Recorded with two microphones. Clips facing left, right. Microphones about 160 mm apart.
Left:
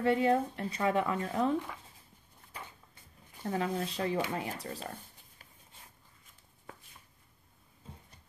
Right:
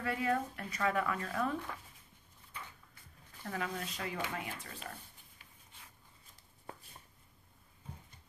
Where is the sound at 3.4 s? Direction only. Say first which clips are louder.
Left 7 dB; 30° left (ahead or behind).